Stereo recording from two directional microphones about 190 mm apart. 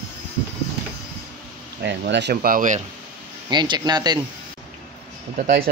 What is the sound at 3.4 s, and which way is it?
Speech, 25° right (ahead or behind).